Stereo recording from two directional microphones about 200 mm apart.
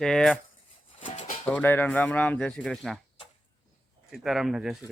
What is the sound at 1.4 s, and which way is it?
Speech, 10° left (ahead or behind).